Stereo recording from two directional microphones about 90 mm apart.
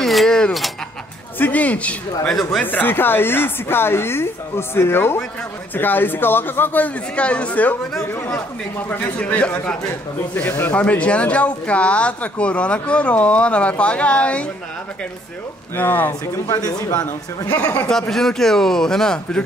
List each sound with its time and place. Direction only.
0.0 s a sound: centre (ahead or behind)
1.4 s speech: 15° left (ahead or behind)
2.6 s a woman's voice: 20° left (ahead or behind)
8.7 s a woman's voice: 25° left (ahead or behind)
15.7 s a woman's voice: 20° left (ahead or behind)
16.4 s speech: 40° left (ahead or behind)
17.6 s speech: 15° left (ahead or behind)
17.9 s speech: 5° left (ahead or behind)